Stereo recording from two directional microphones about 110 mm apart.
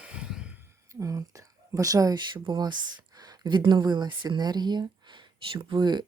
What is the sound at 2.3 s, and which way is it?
Speech, 45° right (ahead or behind).